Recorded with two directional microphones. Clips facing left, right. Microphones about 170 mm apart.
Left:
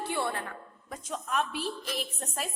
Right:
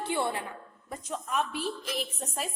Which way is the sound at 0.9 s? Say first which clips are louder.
Even; 5° right (ahead or behind).